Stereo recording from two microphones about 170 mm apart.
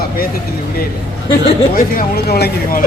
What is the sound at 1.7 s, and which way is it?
Speech, 60° left (ahead or behind).